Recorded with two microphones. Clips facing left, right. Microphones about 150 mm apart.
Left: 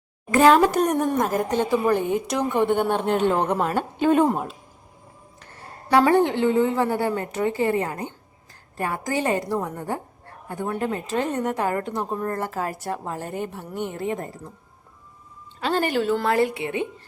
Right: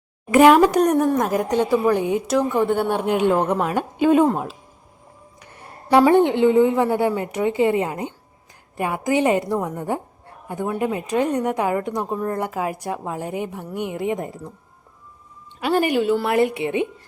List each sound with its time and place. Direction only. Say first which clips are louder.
0.3 s a woman's voice: right 3 dB; 15° right (ahead or behind)
0.8 s a woman's voice: right 4 dB; centre (ahead or behind)
5.4 s a woman's voice: even; 15° right (ahead or behind)
15.6 s a woman's voice: right 3 dB; 10° right (ahead or behind)